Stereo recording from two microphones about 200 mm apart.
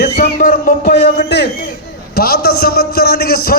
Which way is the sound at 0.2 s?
40° left (ahead or behind).